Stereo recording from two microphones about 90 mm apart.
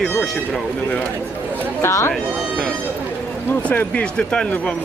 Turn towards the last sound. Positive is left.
turn(degrees=10)  # may be behind; listen again after turning